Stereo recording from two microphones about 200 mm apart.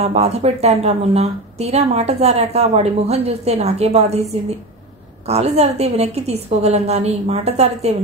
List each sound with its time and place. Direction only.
0.0 s a woman's voice: 30° right (ahead or behind)